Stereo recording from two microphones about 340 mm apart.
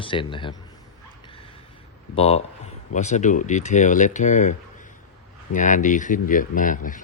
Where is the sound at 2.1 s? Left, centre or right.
Centre.